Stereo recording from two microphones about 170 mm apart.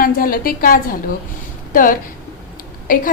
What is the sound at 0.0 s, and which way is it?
A woman's voice, 55° left (ahead or behind).